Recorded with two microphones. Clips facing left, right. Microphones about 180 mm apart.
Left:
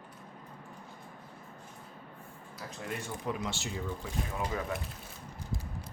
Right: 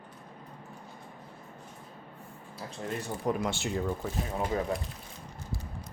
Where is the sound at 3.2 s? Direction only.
50° right (ahead or behind).